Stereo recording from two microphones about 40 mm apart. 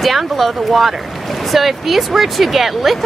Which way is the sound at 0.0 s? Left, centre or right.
Centre.